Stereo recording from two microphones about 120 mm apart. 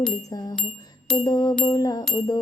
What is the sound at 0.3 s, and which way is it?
A woman's voice, 30° left (ahead or behind).